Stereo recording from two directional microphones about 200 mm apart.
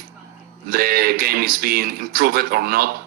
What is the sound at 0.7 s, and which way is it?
Speech, 50° right (ahead or behind).